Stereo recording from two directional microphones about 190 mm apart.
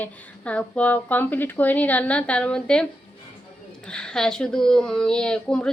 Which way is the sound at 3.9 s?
5° left (ahead or behind).